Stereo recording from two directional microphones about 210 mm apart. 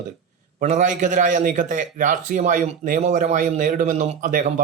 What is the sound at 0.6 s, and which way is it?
A man's voice, 35° right (ahead or behind).